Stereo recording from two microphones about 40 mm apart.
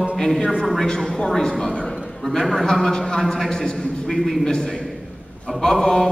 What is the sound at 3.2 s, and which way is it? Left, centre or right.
Speech, centre.